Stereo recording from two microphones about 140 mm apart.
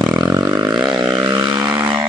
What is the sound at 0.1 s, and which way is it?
Vehicle, 25° right (ahead or behind).